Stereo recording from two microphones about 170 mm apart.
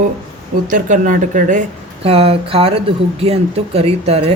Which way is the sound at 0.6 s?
50° right (ahead or behind).